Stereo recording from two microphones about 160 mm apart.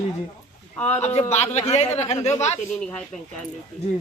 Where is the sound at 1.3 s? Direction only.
45° left (ahead or behind).